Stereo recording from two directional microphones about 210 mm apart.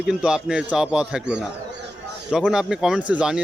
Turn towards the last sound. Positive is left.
turn(degrees=-5)  # may be behind; listen again after turning